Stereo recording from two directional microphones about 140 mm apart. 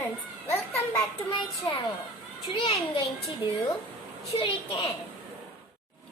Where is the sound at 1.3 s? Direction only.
35° left (ahead or behind).